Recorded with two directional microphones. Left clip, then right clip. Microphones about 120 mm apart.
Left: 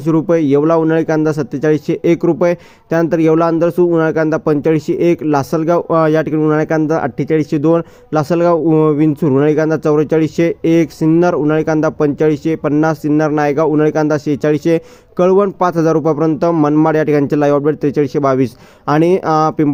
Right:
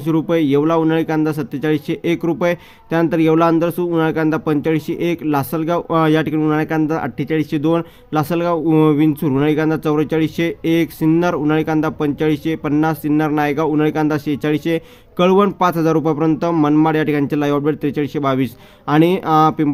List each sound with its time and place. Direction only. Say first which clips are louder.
0.0 s speech: left 4 dB; 35° left (ahead or behind)